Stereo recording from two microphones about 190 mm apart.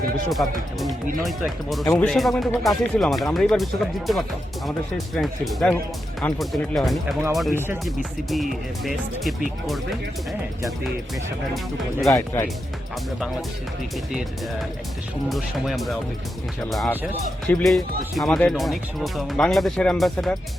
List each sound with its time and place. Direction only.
0.3 s speech: centre (ahead or behind)
1.8 s speech: 15° left (ahead or behind)
2.0 s speech: centre (ahead or behind)
12.0 s speech: 15° left (ahead or behind)
15.3 s speech: centre (ahead or behind)